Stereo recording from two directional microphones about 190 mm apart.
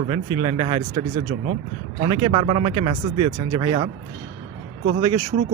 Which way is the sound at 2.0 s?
25° right (ahead or behind).